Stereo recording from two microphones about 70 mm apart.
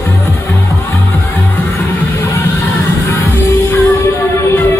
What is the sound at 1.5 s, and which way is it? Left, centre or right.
Music, left.